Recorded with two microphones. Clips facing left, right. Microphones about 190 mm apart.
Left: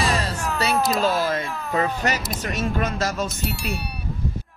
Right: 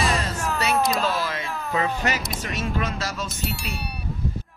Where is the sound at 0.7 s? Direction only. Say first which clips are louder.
Left 2 dB; centre (ahead or behind).